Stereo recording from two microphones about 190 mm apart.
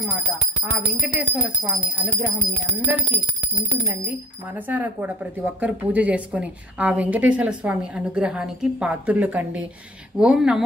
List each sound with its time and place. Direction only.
0.7 s speech: 5° right (ahead or behind)
3.6 s speech: 15° right (ahead or behind)